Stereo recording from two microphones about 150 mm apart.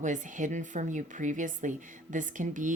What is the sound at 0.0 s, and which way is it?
Speech, 55° right (ahead or behind).